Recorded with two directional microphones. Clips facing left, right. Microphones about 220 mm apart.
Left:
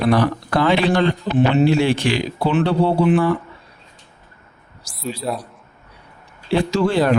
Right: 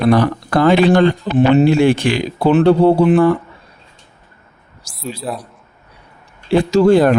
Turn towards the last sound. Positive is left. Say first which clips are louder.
# right 7 dB
turn(degrees=-45)  # may be behind; listen again after turning